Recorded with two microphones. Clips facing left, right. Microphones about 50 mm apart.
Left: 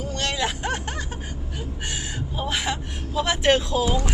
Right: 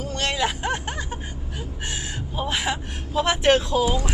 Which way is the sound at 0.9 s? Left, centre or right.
Right.